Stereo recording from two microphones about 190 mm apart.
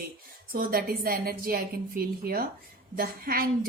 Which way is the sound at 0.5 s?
50° right (ahead or behind).